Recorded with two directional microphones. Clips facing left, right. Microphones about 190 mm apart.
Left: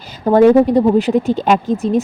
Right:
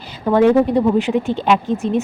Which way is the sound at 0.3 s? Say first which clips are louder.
Left 4 dB; 40° left (ahead or behind).